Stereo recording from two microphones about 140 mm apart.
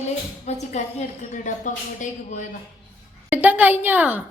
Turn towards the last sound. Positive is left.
turn(degrees=-10)  # may be behind; listen again after turning